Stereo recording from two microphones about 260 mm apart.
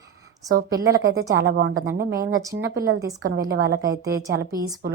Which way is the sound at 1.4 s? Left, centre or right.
Right.